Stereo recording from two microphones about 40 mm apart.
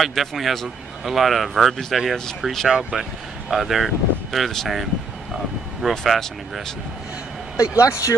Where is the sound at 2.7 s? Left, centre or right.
Centre.